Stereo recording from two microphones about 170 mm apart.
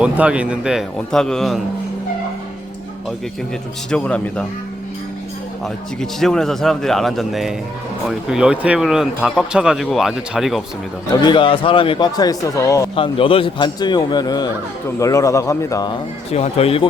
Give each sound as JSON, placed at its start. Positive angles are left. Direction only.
{"t": 0.0, "sound": "speech", "side_deg": -5}
{"t": 3.9, "sound": "a man's voice", "side_deg": 5}
{"t": 5.6, "sound": "speech", "side_deg": 0}
{"t": 11.2, "sound": "speech", "side_deg": 25}
{"t": 13.0, "sound": "a man's voice", "side_deg": 30}
{"t": 16.3, "sound": "speech", "side_deg": 40}